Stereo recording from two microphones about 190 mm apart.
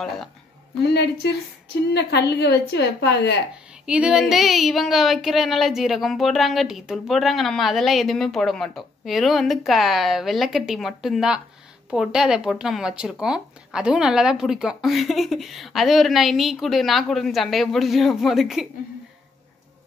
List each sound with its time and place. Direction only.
0.9 s a woman's voice: 60° left (ahead or behind)
3.8 s speech: 5° right (ahead or behind)